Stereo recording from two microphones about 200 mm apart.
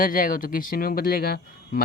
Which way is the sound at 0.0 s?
45° left (ahead or behind).